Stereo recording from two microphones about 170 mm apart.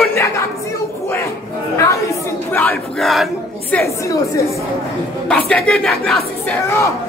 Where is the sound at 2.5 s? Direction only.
5° left (ahead or behind).